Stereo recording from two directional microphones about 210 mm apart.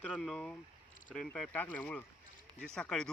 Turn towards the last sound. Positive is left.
turn(degrees=5)  # may be behind; listen again after turning